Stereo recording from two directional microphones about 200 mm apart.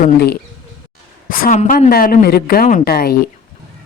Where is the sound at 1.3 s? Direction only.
40° left (ahead or behind).